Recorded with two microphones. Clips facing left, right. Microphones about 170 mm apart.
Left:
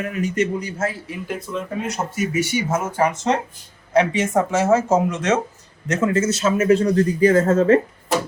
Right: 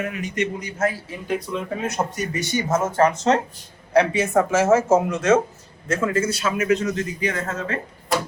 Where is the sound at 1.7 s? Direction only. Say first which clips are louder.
Right 1 dB; 5° left (ahead or behind).